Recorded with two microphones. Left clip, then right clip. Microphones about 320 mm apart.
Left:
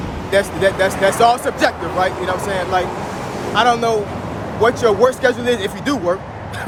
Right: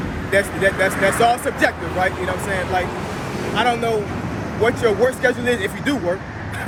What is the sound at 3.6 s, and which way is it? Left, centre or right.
Speech, centre.